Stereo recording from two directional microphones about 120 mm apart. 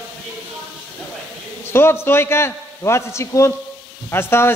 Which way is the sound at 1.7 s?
20° left (ahead or behind).